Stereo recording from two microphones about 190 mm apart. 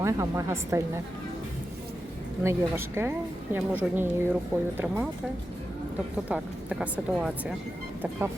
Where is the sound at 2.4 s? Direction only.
15° right (ahead or behind).